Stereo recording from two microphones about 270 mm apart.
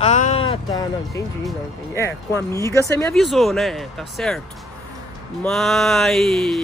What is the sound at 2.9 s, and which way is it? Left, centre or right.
Speech, centre.